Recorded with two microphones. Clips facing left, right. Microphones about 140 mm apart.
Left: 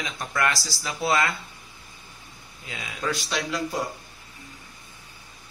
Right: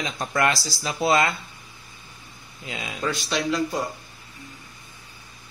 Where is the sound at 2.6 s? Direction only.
25° right (ahead or behind).